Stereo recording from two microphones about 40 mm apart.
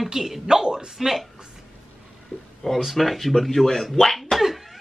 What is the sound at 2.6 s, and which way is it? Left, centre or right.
Speech, centre.